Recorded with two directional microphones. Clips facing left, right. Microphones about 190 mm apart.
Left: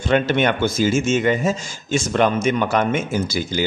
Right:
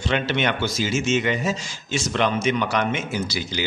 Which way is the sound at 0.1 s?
50° left (ahead or behind).